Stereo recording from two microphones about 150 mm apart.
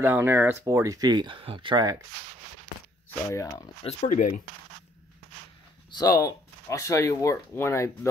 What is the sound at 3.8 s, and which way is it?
Speech, 50° left (ahead or behind).